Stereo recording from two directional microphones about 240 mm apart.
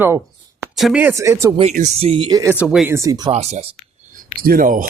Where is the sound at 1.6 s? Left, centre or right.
Right.